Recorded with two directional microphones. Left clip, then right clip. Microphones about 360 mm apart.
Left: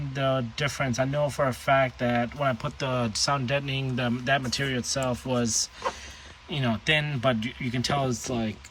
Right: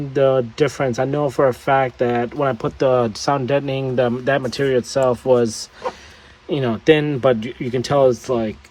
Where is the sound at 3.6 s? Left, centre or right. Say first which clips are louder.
Right 11 dB; centre.